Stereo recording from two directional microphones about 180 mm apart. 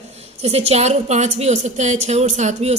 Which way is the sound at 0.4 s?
35° right (ahead or behind).